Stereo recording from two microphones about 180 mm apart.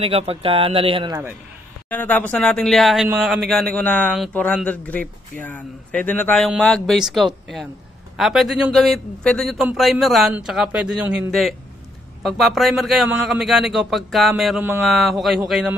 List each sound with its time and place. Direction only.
0.0 s speech: 35° right (ahead or behind)
1.9 s a man's voice: 10° left (ahead or behind)